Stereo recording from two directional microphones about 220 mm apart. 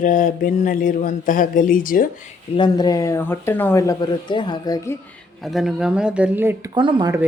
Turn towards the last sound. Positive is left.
turn(degrees=-20)  # may be behind; listen again after turning